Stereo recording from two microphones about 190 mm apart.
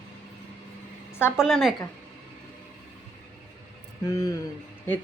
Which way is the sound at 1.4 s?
Centre (ahead or behind).